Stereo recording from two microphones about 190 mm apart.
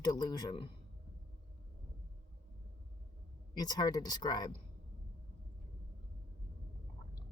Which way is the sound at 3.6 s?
20° left (ahead or behind).